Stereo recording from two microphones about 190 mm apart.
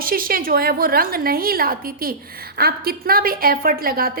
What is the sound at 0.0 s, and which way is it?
A woman's voice, 50° right (ahead or behind).